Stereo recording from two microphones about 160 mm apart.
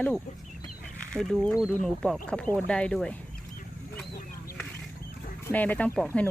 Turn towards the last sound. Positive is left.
turn(degrees=10)  # may be behind; listen again after turning